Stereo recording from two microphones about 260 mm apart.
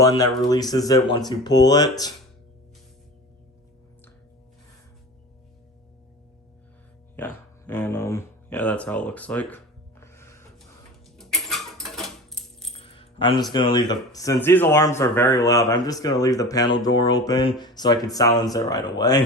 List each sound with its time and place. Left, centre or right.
0.0 s speech: centre
7.7 s speech: centre
10.0 s music: centre
11.2 s keys jangling: centre
12.7 s speech: left